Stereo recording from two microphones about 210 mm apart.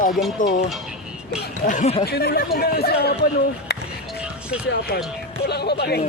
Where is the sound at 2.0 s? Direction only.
50° left (ahead or behind).